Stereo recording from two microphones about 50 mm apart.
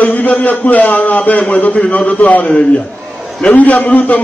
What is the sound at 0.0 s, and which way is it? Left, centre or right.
A man's voice, left.